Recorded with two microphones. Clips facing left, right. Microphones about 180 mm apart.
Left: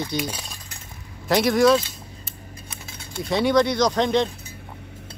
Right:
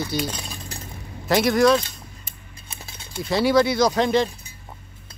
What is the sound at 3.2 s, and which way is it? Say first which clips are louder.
Speech: right 1 dB; centre (ahead or behind).